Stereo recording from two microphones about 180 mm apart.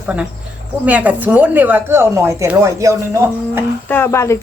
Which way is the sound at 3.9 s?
15° left (ahead or behind).